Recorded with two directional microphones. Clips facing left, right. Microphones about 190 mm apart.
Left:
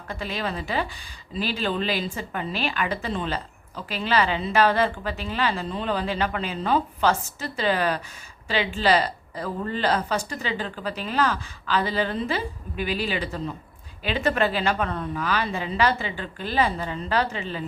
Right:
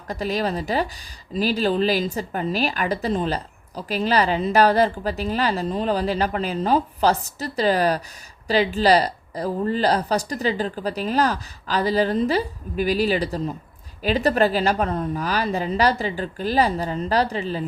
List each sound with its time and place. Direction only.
0.1 s a woman's voice: 40° right (ahead or behind)